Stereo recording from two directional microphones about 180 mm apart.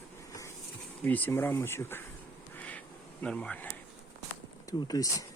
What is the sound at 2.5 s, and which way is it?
Bee, 10° left (ahead or behind).